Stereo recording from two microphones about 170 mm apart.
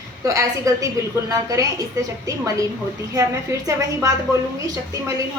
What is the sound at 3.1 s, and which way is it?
Speech, 20° right (ahead or behind).